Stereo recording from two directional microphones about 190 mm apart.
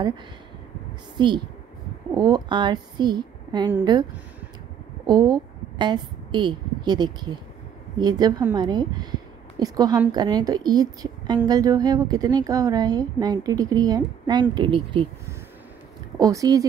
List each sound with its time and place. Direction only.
1.1 s a woman's voice: 25° right (ahead or behind)
5.0 s a woman's voice: 20° right (ahead or behind)
16.2 s a woman's voice: 20° right (ahead or behind)